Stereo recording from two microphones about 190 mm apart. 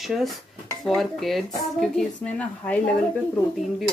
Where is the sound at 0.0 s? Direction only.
Centre (ahead or behind).